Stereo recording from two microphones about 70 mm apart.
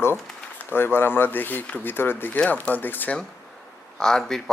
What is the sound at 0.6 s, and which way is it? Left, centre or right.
Speech, left.